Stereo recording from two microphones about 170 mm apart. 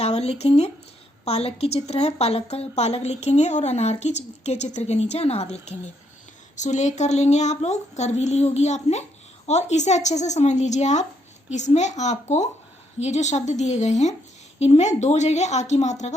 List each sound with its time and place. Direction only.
0.0 s a woman's voice: 40° left (ahead or behind)